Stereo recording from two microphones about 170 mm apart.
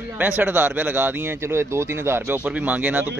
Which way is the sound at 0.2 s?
10° right (ahead or behind).